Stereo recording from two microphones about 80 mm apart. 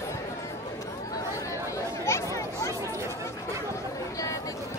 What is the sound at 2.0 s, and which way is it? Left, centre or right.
Chatter, left.